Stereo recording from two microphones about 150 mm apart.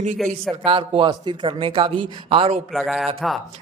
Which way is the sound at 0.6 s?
35° right (ahead or behind).